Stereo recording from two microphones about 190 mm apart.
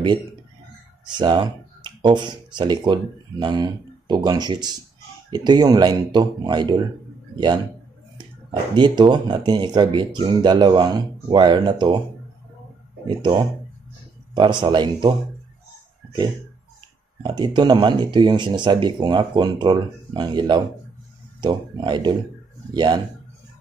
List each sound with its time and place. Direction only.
1.1 s speech: 25° right (ahead or behind)
8.2 s speech: 25° right (ahead or behind)
13.0 s speech: 25° right (ahead or behind)
17.2 s speech: 25° right (ahead or behind)